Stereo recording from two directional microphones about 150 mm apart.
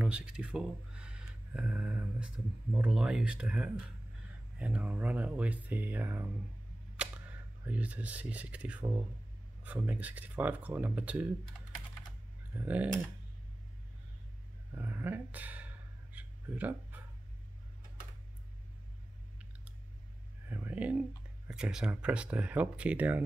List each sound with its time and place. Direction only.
0.0 s speech: 5° right (ahead or behind)
12.5 s speech: 10° right (ahead or behind)
14.8 s a sound: 15° right (ahead or behind)
20.4 s speech: 15° right (ahead or behind)